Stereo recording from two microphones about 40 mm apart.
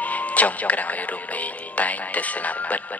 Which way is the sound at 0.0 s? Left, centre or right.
Left.